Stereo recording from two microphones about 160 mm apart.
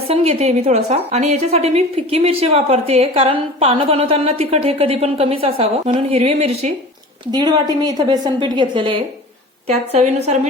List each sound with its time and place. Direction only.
0.1 s a woman's voice: 40° right (ahead or behind)
7.3 s a woman's voice: 25° right (ahead or behind); by 10.3 s 45° right (ahead or behind)